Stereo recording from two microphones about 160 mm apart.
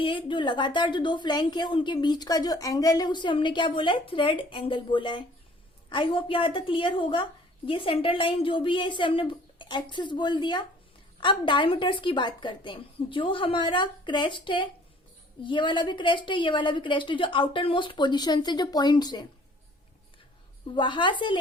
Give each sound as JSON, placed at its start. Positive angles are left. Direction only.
{"t": 0.0, "sound": "a woman's voice", "side_deg": 30}
{"t": 20.7, "sound": "a woman's voice", "side_deg": 30}